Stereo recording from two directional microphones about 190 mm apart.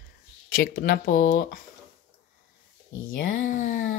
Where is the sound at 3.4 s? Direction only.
45° left (ahead or behind).